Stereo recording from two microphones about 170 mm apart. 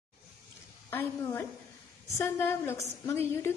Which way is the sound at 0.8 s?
15° left (ahead or behind).